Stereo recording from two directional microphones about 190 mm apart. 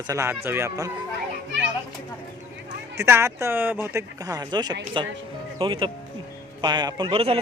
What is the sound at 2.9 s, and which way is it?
Speech, 15° right (ahead or behind).